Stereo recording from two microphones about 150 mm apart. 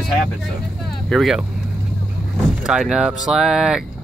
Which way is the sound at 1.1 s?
Centre (ahead or behind).